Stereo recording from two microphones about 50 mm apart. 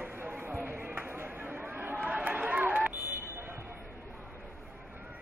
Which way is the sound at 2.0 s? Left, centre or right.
Right.